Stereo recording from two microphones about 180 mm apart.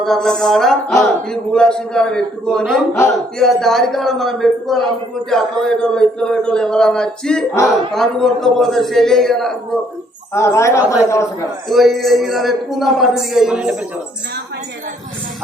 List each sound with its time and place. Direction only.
0.0 s a man's voice: centre (ahead or behind)
10.3 s a woman's voice: 15° left (ahead or behind)
11.7 s a man's voice: centre (ahead or behind)